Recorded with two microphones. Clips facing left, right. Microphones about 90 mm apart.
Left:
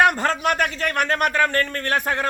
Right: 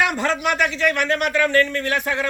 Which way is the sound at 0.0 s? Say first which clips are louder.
Left 2 dB; 40° left (ahead or behind).